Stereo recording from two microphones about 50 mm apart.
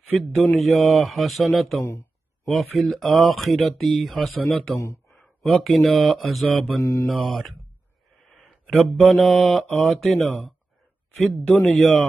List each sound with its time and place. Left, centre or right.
0.1 s speech: centre
6.8 s mantra: left
7.2 s speech: centre
8.3 s mantra: centre
11.6 s speech: centre